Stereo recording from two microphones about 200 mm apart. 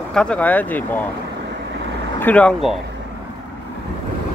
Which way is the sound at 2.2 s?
5° left (ahead or behind).